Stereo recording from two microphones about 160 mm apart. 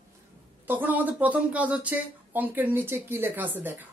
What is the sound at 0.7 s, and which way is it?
Speech, 10° right (ahead or behind).